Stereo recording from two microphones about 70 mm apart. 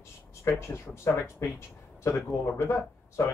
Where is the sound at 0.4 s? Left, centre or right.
Left.